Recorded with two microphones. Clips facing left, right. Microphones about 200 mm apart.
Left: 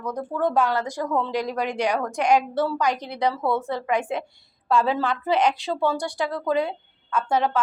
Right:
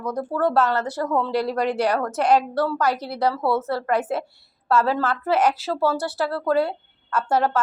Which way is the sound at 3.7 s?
15° left (ahead or behind).